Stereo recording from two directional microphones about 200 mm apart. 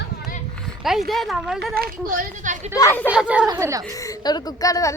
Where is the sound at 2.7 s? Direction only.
10° left (ahead or behind).